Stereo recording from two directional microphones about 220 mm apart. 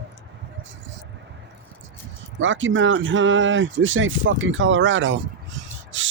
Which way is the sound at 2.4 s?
60° right (ahead or behind).